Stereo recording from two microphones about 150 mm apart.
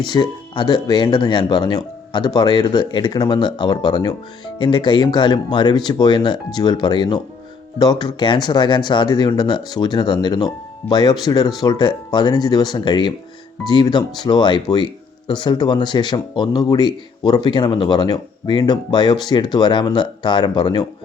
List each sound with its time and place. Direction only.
0.1 s speech: 30° left (ahead or behind)